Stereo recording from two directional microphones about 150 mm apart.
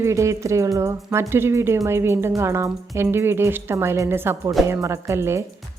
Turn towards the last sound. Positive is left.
turn(degrees=-15)  # may be behind; listen again after turning